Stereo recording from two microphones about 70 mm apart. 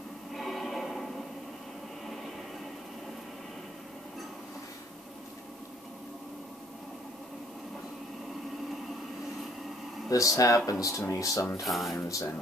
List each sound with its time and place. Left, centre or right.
0.3 s music: centre
10.0 s speech: left
11.6 s speech: centre